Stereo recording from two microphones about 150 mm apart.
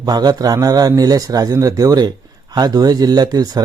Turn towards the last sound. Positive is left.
turn(degrees=-25)  # may be behind; listen again after turning